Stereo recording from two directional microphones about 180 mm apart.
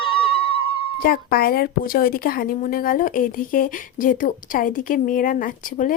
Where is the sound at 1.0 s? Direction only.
55° left (ahead or behind).